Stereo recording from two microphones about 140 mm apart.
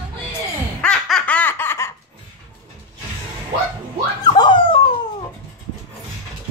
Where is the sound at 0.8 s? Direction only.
10° left (ahead or behind).